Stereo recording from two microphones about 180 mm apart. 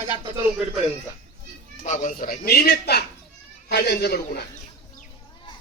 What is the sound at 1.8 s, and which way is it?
Speech, 45° left (ahead or behind).